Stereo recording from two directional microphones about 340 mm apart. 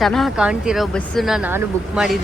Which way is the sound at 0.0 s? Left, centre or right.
Centre.